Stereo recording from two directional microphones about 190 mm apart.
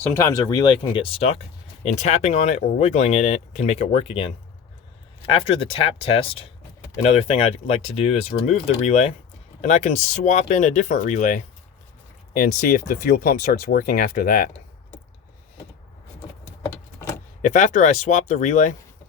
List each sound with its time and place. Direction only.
0.1 s speech: 15° left (ahead or behind); by 14.5 s 50° left (ahead or behind)
17.4 s speech: 40° left (ahead or behind)